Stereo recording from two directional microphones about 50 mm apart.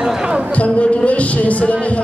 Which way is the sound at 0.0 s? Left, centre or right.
Centre.